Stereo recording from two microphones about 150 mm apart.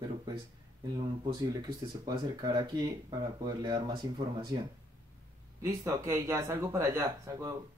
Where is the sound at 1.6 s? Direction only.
25° right (ahead or behind).